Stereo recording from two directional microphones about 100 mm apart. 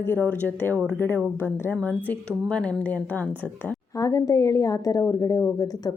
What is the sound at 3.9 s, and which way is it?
A woman's voice, 35° left (ahead or behind).